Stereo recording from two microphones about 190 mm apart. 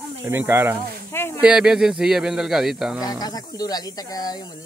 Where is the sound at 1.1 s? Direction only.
10° left (ahead or behind).